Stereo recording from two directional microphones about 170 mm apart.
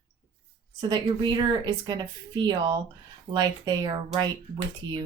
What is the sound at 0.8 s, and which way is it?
Speech, 25° right (ahead or behind).